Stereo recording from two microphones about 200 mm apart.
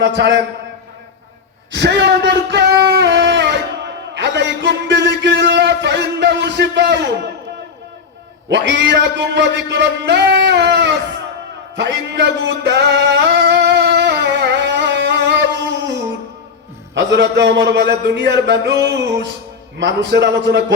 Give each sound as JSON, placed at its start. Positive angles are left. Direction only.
{"t": 0.0, "sound": "a man's voice", "side_deg": -60}
{"t": 1.7, "sound": "speech", "side_deg": -60}
{"t": 8.4, "sound": "a man's voice", "side_deg": -65}
{"t": 11.8, "sound": "singing", "side_deg": -60}
{"t": 16.9, "sound": "a man's voice", "side_deg": -60}